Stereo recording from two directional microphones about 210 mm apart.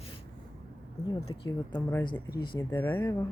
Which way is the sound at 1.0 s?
20° left (ahead or behind).